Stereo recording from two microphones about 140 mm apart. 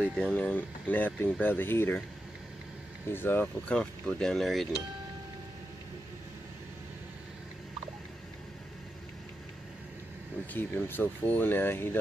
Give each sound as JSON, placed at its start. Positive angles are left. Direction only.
{"t": 0.0, "sound": "speech", "side_deg": 10}
{"t": 3.1, "sound": "speech", "side_deg": 15}
{"t": 10.4, "sound": "speech", "side_deg": 15}